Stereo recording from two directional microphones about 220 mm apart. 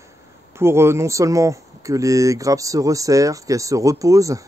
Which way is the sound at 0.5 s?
10° right (ahead or behind).